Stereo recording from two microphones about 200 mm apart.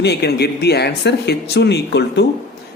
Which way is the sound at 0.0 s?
55° left (ahead or behind).